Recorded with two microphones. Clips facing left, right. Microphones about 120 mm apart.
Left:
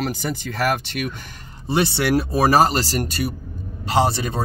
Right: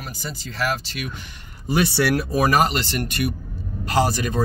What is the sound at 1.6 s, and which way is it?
Speech, 25° left (ahead or behind).